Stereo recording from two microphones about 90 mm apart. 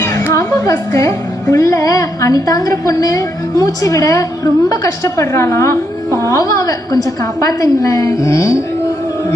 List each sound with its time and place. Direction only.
0.0 s music: 35° left (ahead or behind)
0.3 s a woman's voice: 35° left (ahead or behind)